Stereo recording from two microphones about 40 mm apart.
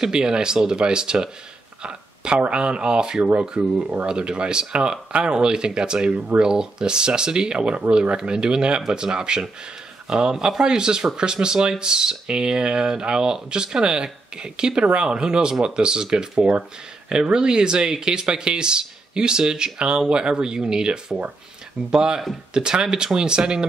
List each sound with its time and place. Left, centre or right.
0.0 s speech: centre
1.8 s a sound: right
2.5 s speech: right